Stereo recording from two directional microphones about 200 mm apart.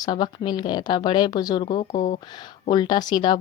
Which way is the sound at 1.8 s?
40° left (ahead or behind).